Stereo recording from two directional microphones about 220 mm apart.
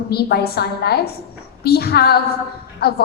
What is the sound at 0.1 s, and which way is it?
A woman's voice, 45° left (ahead or behind).